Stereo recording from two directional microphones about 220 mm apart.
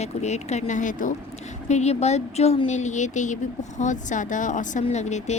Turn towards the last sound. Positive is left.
turn(degrees=30)  # may be behind; listen again after turning